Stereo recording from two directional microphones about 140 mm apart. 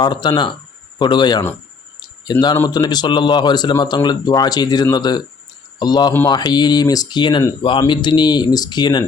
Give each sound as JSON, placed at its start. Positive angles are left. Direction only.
{"t": 0.0, "sound": "speech", "side_deg": 30}
{"t": 2.0, "sound": "a sound", "side_deg": 30}
{"t": 2.6, "sound": "speech", "side_deg": 30}